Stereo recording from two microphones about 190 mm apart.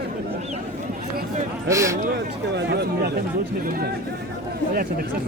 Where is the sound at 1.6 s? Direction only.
15° right (ahead or behind).